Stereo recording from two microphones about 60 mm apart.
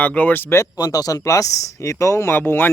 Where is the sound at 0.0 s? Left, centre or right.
Left.